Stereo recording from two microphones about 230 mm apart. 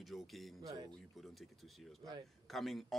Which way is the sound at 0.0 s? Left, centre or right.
Centre.